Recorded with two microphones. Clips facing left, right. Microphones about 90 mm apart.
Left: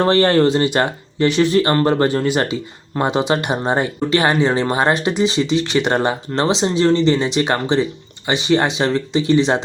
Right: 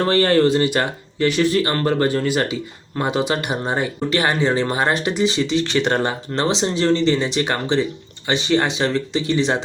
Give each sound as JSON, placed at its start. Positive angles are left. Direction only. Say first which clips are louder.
{"t": 0.0, "sound": "speech", "louder": "left 2 dB", "side_deg": 30}